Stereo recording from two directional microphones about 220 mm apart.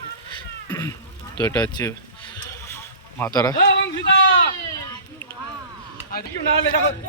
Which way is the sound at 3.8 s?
55° left (ahead or behind).